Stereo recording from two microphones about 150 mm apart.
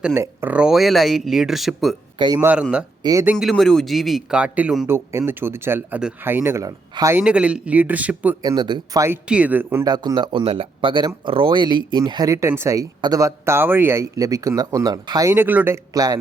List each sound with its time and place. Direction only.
0.1 s speech: 15° right (ahead or behind)
2.1 s speech: 30° right (ahead or behind)
2.4 s speech: 10° right (ahead or behind)
3.0 s speech: 25° right (ahead or behind)
3.3 s speech: centre (ahead or behind)
4.9 s speech: 15° right (ahead or behind)
8.4 s speech: 25° right (ahead or behind)
9.3 s speech: 10° right (ahead or behind)
9.8 s speech: 25° right (ahead or behind)
15.9 s speech: 25° right (ahead or behind)